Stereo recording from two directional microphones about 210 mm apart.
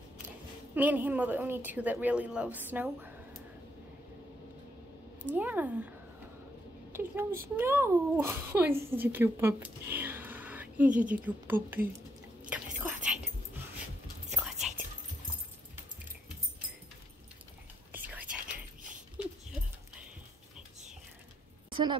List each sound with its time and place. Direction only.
0.7 s a child's voice: 10° right (ahead or behind)
5.3 s a child's voice: 10° right (ahead or behind)
6.9 s a woman's voice: 10° right (ahead or behind)
12.4 s whispering: 5° right (ahead or behind)
14.3 s whispering: centre (ahead or behind)
17.9 s whispering: 10° right (ahead or behind)
21.6 s a sound: 25° right (ahead or behind)